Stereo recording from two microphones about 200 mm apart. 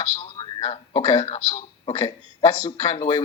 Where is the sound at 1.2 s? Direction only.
35° left (ahead or behind).